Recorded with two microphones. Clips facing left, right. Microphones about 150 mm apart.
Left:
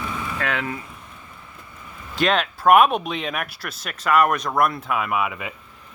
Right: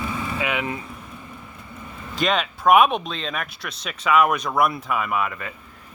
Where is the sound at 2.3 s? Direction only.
Centre (ahead or behind).